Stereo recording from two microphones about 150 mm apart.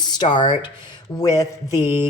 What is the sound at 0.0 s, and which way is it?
Speech, 30° left (ahead or behind).